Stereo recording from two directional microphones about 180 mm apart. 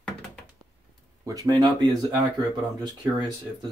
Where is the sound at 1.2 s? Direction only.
20° right (ahead or behind).